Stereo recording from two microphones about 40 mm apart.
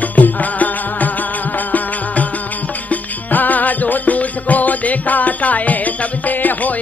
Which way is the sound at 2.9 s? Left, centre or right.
Left.